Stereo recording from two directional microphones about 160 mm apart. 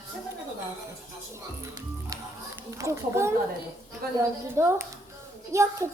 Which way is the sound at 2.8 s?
15° right (ahead or behind).